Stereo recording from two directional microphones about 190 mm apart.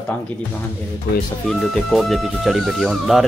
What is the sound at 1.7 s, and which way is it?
Speech, centre (ahead or behind).